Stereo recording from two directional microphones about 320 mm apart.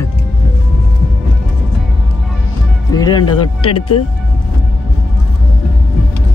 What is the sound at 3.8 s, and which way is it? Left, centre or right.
Speech, left.